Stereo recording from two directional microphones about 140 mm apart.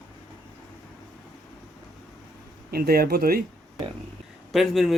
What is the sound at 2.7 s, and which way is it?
Speech, 90° right.